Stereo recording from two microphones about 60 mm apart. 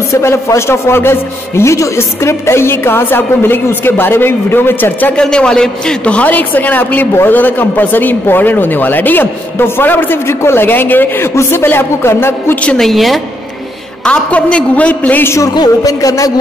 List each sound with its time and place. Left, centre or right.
0.1 s a woman's voice: left
5.1 s a man's voice: centre; by 12.5 s left
12.7 s a woman's voice: centre
14.0 s a man's voice: left
15.2 s a woman's voice: left